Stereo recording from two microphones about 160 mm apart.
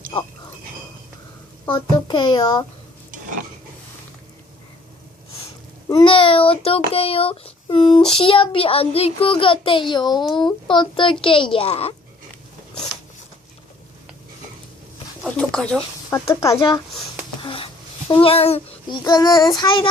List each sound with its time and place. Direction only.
0.1 s a child's voice: 35° left (ahead or behind)
1.6 s a child's voice: 30° left (ahead or behind)
5.9 s a child's voice: 30° left (ahead or behind)
10.1 s speech: centre (ahead or behind)
10.3 s a child's voice: 30° left (ahead or behind)
15.2 s a sound: 5° left (ahead or behind)
16.0 s a child's voice: 20° left (ahead or behind)
16.6 s a child's voice: 30° left (ahead or behind)
17.4 s a sound: 35° left (ahead or behind)
18.1 s a child's voice: 35° left (ahead or behind)
19.0 s a child's voice: 25° left (ahead or behind)